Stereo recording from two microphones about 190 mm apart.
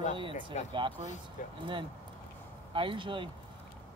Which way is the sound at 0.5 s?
40° left (ahead or behind).